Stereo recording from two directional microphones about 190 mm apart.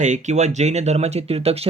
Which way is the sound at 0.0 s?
40° right (ahead or behind).